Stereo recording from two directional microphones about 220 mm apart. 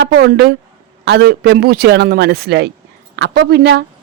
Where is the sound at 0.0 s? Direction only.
50° right (ahead or behind).